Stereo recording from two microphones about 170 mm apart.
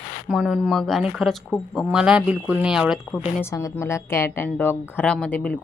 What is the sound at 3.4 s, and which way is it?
Speech, 15° left (ahead or behind).